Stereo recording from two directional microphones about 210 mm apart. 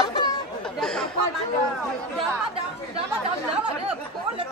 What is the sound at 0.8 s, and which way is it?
Chatter, 5° left (ahead or behind).